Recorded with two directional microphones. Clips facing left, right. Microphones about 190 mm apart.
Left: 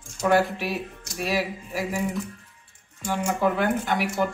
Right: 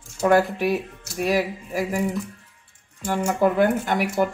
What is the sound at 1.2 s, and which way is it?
Speech, 50° right (ahead or behind).